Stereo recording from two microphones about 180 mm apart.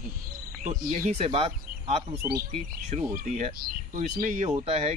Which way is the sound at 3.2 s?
45° right (ahead or behind).